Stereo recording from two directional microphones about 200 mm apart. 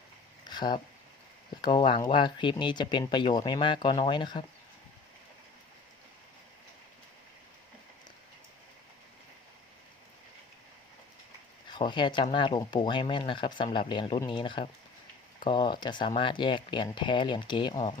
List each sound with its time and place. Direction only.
0.4 s a sound: 20° left (ahead or behind)
1.6 s speech: 25° left (ahead or behind)
11.7 s speech: 25° left (ahead or behind)